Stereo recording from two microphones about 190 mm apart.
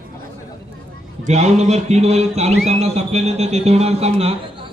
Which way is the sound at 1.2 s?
35° right (ahead or behind).